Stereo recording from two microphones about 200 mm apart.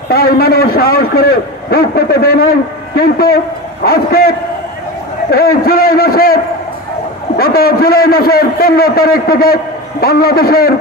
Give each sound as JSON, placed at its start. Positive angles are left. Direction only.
{"t": 0.1, "sound": "a man's voice", "side_deg": 50}